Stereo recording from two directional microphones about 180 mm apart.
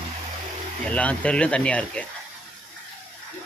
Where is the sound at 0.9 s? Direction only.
5° left (ahead or behind).